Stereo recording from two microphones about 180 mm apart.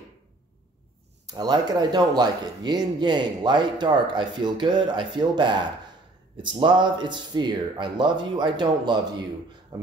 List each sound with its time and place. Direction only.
1.3 s speech: 20° right (ahead or behind)